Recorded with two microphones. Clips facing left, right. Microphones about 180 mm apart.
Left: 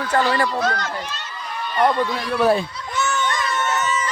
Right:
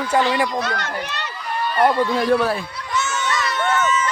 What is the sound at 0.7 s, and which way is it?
Speech, 65° right (ahead or behind).